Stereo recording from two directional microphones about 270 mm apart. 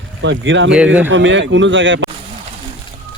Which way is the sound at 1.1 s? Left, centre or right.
Right.